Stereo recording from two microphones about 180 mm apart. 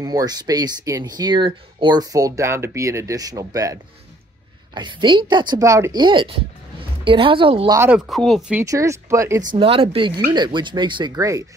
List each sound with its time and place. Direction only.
0.0 s a woman's voice: 20° right (ahead or behind)
7.7 s speech: 10° right (ahead or behind)
8.1 s speech: centre (ahead or behind)
8.6 s speech: 15° right (ahead or behind)
9.6 s speech: 30° right (ahead or behind)